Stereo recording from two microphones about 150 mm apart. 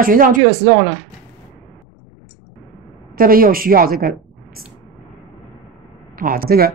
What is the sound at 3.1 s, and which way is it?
A woman's voice, 75° right (ahead or behind).